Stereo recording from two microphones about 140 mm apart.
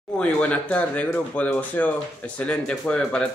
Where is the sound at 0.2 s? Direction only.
10° left (ahead or behind).